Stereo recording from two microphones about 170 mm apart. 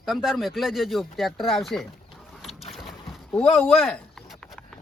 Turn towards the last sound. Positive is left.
turn(degrees=5)  # may be behind; listen again after turning